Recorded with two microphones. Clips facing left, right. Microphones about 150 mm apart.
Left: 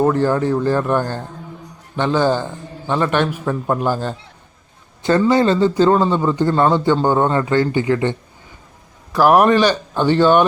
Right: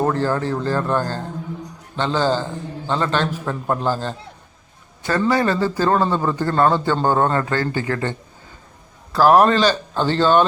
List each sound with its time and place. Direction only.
0.0 s a man's voice: 15° left (ahead or behind)
5.3 s a man's voice: 25° left (ahead or behind)
9.1 s a man's voice: 15° left (ahead or behind)